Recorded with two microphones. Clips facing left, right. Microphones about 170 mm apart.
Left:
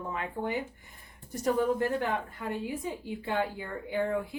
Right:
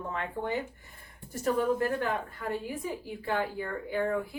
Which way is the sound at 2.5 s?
20° left (ahead or behind).